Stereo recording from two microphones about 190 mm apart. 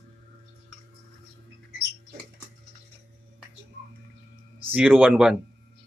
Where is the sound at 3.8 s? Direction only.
60° right (ahead or behind).